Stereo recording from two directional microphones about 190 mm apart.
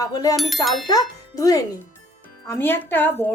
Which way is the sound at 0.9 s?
20° left (ahead or behind).